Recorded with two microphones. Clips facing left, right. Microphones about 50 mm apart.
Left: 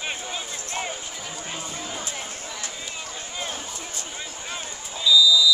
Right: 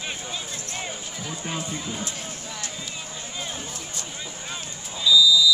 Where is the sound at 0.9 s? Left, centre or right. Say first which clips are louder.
Even; centre.